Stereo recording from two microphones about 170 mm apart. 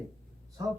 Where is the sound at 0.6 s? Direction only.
15° right (ahead or behind).